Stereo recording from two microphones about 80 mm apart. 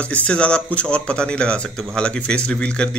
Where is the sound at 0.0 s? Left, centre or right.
Centre.